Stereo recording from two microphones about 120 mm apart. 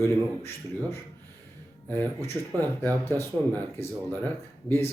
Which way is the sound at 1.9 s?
15° left (ahead or behind).